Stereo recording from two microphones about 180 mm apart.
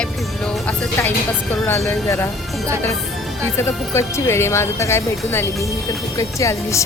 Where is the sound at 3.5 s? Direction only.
15° left (ahead or behind).